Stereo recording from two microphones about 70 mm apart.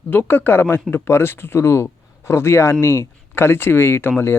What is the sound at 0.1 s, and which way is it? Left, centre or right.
Speech, left.